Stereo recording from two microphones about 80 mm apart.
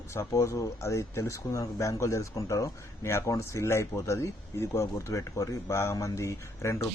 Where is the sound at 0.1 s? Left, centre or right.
Left.